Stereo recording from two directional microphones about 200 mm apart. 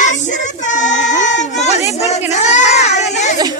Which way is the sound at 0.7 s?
35° left (ahead or behind).